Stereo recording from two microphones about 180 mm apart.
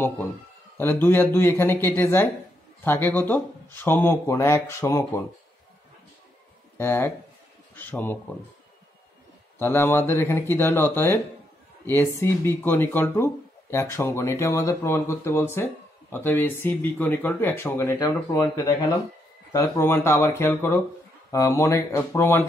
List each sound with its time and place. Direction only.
0.7 s speech: 10° left (ahead or behind)
6.8 s speech: 10° left (ahead or behind)
9.6 s speech: 10° left (ahead or behind)